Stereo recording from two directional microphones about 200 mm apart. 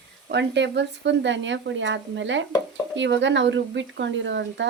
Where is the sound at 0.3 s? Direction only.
60° right (ahead or behind).